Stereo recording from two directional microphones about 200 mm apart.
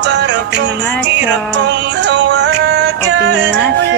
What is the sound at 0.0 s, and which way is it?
Music, 60° right (ahead or behind).